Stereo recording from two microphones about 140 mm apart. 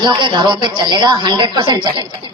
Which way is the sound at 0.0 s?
35° right (ahead or behind).